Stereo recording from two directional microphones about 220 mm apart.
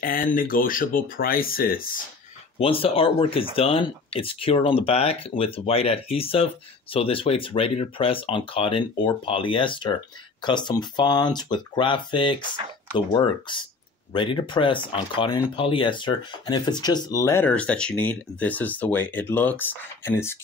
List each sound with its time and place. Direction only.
0.0 s speech: 40° left (ahead or behind)
2.6 s speech: 25° left (ahead or behind)